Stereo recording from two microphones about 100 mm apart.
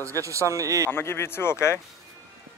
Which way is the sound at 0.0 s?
30° right (ahead or behind).